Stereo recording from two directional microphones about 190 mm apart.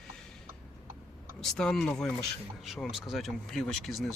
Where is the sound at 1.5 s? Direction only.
5° left (ahead or behind).